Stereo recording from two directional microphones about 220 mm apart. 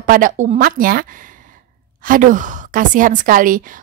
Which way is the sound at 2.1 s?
35° right (ahead or behind).